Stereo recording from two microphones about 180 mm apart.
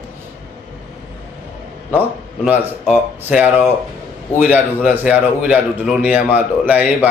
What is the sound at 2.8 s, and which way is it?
A man's voice, 5° right (ahead or behind).